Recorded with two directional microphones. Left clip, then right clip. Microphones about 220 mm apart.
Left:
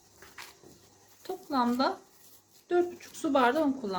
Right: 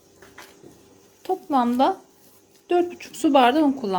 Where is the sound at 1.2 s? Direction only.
30° right (ahead or behind).